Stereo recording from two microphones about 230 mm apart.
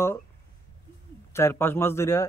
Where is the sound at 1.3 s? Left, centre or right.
Centre.